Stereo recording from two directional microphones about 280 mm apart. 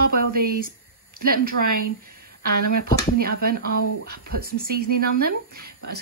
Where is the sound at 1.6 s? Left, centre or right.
Right.